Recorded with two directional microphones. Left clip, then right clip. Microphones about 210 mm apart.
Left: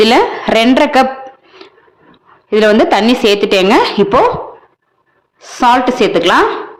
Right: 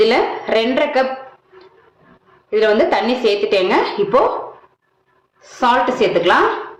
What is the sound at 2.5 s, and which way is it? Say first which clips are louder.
A woman's voice: left 5 dB; 55° left (ahead or behind).